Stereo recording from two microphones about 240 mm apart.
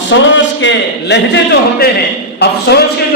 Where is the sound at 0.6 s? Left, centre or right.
Left.